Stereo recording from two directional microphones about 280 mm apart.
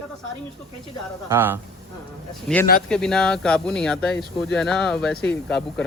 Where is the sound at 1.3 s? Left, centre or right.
Centre.